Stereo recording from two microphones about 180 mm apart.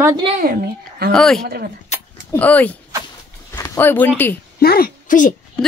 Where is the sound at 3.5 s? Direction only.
15° left (ahead or behind).